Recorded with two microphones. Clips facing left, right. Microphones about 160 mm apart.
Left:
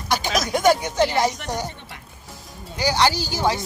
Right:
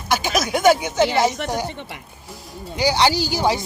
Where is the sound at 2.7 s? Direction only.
15° right (ahead or behind).